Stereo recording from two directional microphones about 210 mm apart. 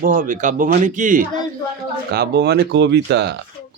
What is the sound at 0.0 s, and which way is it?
Speech, 40° right (ahead or behind).